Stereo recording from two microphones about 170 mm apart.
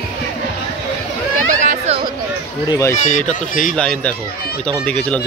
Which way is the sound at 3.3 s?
50° left (ahead or behind).